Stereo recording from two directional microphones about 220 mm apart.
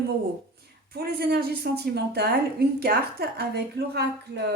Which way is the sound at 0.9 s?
45° right (ahead or behind).